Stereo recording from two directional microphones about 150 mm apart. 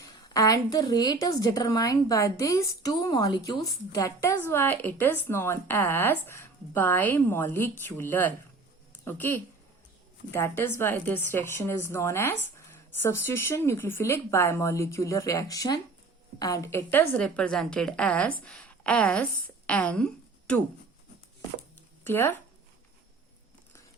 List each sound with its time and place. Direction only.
0.3 s a woman's voice: 25° left (ahead or behind); by 20.1 s 10° left (ahead or behind)
22.0 s speech: 15° left (ahead or behind)